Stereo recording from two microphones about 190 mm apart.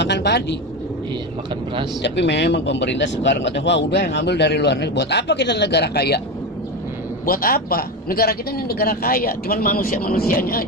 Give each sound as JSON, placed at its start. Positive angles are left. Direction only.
{"t": 0.0, "sound": "speech", "side_deg": 65}
{"t": 2.0, "sound": "speech", "side_deg": 65}
{"t": 7.3, "sound": "a man's voice", "side_deg": 50}